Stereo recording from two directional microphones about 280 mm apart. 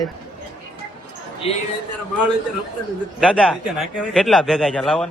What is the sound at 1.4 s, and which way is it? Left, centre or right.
Speech, left.